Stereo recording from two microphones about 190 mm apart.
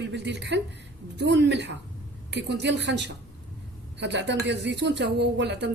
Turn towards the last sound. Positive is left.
turn(degrees=-65)  # may be behind; listen again after turning